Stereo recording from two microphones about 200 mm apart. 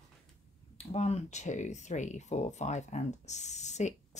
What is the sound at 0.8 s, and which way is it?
Speech, 30° left (ahead or behind).